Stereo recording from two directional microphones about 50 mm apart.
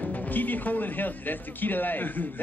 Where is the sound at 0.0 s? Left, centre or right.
Left.